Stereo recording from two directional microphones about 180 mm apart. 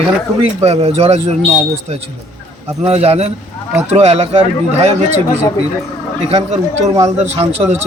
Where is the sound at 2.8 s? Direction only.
35° right (ahead or behind).